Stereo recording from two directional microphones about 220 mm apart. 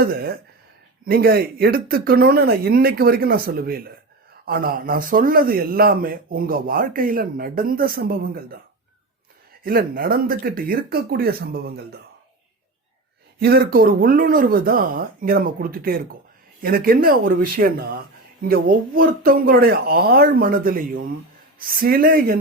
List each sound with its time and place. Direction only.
0.0 s a man's voice: 45° right (ahead or behind)
9.6 s speech: 40° right (ahead or behind)
13.4 s a man's voice: 45° right (ahead or behind)